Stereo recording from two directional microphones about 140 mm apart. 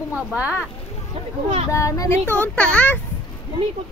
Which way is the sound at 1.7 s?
25° left (ahead or behind).